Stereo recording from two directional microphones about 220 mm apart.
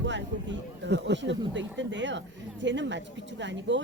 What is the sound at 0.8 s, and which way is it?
Speech, 50° right (ahead or behind).